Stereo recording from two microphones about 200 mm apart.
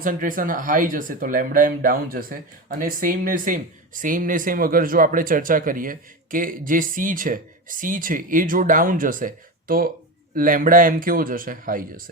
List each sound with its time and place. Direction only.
0.0 s speech: 40° right (ahead or behind)